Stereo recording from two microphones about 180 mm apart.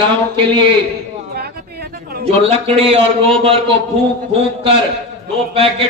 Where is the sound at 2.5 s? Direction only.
30° right (ahead or behind).